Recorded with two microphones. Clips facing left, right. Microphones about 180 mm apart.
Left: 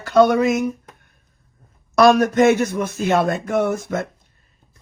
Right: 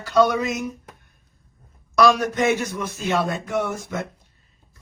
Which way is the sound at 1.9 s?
50° left (ahead or behind).